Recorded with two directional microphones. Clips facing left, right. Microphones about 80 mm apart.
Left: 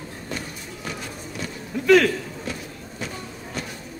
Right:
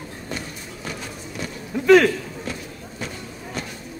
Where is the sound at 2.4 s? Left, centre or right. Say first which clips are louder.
Right 1 dB; centre.